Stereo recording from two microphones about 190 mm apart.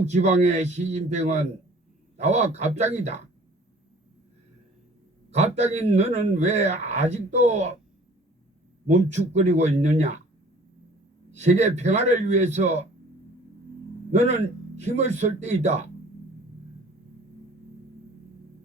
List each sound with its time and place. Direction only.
0.0 s speech: 35° right (ahead or behind)
5.3 s speech: 35° right (ahead or behind)
8.9 s speech: 35° right (ahead or behind)
11.3 s speech: 35° right (ahead or behind)
14.1 s speech: 35° right (ahead or behind)